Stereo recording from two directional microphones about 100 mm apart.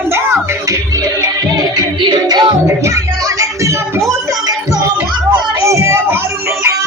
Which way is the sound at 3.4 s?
30° right (ahead or behind).